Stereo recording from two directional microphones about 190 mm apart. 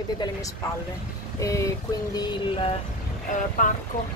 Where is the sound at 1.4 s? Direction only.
15° left (ahead or behind).